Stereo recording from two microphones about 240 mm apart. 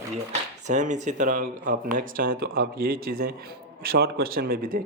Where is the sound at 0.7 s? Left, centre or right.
Right.